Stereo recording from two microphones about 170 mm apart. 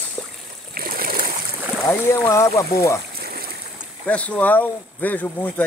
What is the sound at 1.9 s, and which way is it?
Speech, 15° left (ahead or behind).